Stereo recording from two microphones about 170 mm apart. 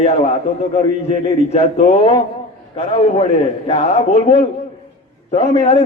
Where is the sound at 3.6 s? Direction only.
35° left (ahead or behind).